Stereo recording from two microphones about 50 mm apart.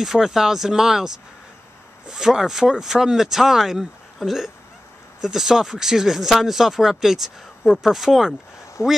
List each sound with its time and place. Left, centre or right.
0.0 s speech: centre
8.8 s speech: left